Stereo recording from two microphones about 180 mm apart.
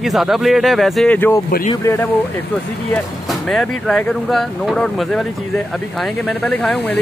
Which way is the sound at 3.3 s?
Centre (ahead or behind).